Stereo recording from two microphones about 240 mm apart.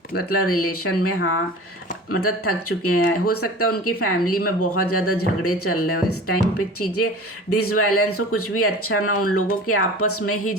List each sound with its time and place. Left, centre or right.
0.3 s speech: left